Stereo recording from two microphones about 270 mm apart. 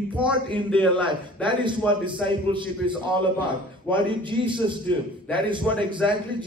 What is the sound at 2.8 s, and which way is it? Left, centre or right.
A man's voice, centre.